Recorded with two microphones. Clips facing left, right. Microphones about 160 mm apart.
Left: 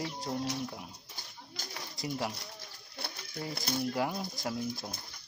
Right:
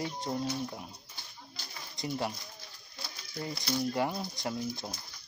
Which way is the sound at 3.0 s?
65° left (ahead or behind).